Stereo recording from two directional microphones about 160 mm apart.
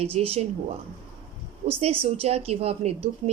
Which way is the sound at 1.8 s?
40° right (ahead or behind).